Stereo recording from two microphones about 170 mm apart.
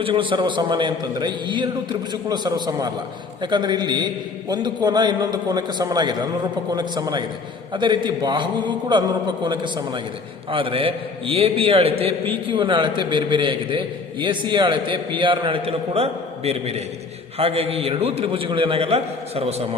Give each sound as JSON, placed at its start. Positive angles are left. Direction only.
{"t": 0.0, "sound": "a man's voice", "side_deg": -30}